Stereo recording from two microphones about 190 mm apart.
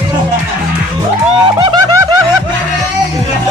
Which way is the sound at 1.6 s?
20° right (ahead or behind).